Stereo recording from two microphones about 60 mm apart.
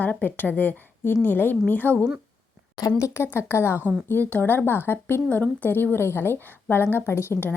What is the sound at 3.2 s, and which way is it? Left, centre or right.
Speech, left.